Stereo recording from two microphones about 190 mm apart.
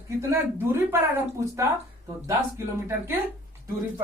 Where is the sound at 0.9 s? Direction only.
15° right (ahead or behind).